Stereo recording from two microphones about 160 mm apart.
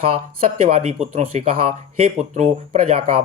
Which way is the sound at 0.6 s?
40° right (ahead or behind).